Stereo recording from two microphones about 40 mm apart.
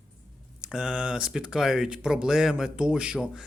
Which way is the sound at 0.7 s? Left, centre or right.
Right.